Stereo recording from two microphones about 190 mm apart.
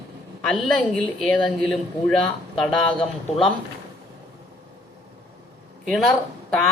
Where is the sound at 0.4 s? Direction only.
Centre (ahead or behind).